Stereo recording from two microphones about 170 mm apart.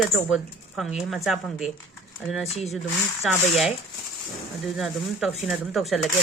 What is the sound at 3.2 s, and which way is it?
Speech, centre (ahead or behind).